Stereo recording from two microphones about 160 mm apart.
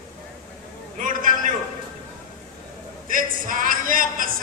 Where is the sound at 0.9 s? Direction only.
55° right (ahead or behind).